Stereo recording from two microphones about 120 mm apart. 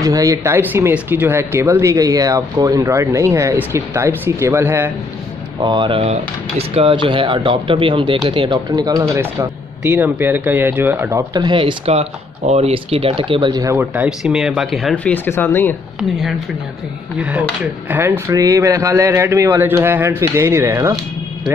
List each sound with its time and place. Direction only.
0.0 s speech: 30° right (ahead or behind)
5.6 s speech: 40° right (ahead or behind)
8.5 s speech: 30° right (ahead or behind)
11.3 s speech: 40° right (ahead or behind)
14.0 s speech: 5° right (ahead or behind)
15.0 s speech: 15° left (ahead or behind)
16.0 s speech: centre (ahead or behind)
18.3 s speech: 30° right (ahead or behind)